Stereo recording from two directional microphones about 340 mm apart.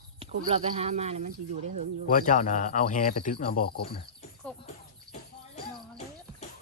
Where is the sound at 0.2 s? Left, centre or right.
Centre.